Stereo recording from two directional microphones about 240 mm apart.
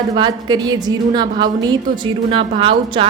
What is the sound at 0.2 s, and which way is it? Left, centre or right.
A woman's voice, centre.